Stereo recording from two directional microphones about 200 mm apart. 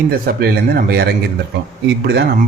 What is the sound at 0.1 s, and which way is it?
Speech, 50° right (ahead or behind).